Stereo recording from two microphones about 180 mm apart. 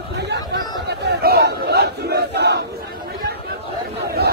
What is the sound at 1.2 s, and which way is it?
Crowd, 65° right (ahead or behind).